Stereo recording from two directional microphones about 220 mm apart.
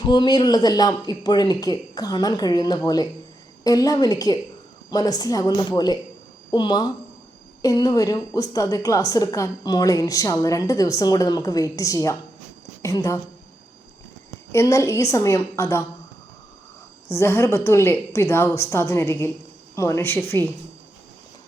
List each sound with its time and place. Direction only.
0.0 s a woman's voice: 20° left (ahead or behind)
14.5 s a woman's voice: 15° left (ahead or behind)
17.1 s a woman's voice: 10° left (ahead or behind)